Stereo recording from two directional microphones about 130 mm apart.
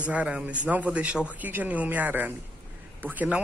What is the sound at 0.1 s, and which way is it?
Speech, 10° right (ahead or behind).